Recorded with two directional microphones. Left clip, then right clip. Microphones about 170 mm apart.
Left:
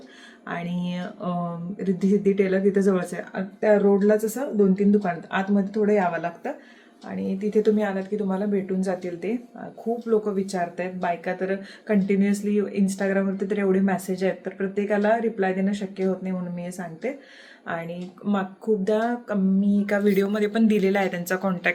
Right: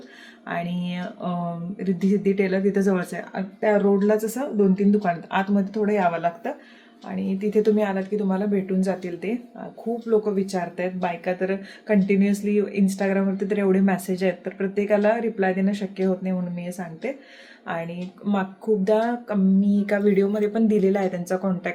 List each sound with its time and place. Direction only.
0.4 s speech: 15° right (ahead or behind)